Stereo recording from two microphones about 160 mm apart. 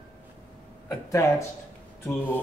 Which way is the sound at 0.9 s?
20° left (ahead or behind).